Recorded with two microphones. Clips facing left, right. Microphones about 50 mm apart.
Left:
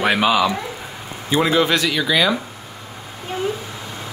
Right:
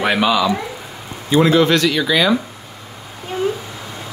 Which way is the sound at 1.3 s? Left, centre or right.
Centre.